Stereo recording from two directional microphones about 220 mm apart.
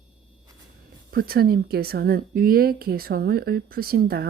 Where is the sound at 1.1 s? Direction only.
45° right (ahead or behind).